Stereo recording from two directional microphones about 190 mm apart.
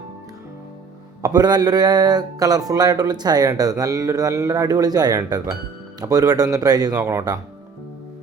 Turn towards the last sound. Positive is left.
turn(degrees=-20)  # may be behind; listen again after turning